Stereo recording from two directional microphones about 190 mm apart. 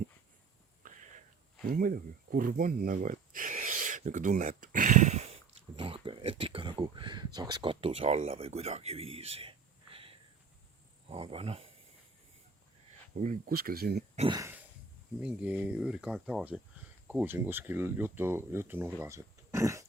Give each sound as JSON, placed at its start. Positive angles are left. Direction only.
{"t": 0.8, "sound": "whispering", "side_deg": -45}
{"t": 1.7, "sound": "speech", "side_deg": -50}
{"t": 13.1, "sound": "speech", "side_deg": -50}
{"t": 14.2, "sound": "speech", "side_deg": -25}
{"t": 15.2, "sound": "speech", "side_deg": -5}
{"t": 18.9, "sound": "a sound", "side_deg": -15}